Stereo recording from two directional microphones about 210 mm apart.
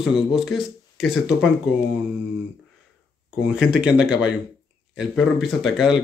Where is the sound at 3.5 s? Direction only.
5° right (ahead or behind).